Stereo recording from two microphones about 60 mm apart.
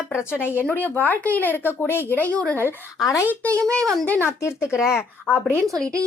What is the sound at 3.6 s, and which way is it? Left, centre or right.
Speech, centre.